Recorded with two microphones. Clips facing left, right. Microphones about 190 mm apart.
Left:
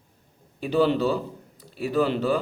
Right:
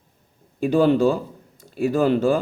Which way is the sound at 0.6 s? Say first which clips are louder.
Right 5 dB; 50° right (ahead or behind).